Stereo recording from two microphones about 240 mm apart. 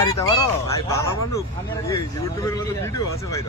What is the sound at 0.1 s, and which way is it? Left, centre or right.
Speech, centre.